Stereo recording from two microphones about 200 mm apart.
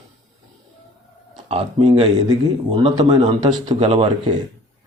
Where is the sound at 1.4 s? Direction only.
30° right (ahead or behind).